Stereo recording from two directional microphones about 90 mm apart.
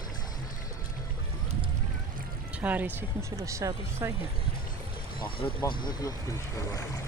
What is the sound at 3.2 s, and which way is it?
Speech, 35° right (ahead or behind).